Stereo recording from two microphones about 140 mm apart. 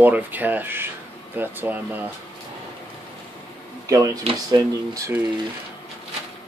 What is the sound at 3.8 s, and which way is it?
Speech, 25° right (ahead or behind).